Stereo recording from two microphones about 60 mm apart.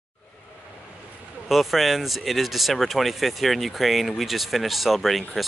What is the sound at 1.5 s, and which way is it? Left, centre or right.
Speech, centre.